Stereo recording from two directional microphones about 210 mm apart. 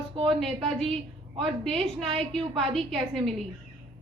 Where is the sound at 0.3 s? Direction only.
Centre (ahead or behind).